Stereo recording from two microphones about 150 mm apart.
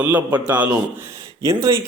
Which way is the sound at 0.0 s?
10° right (ahead or behind).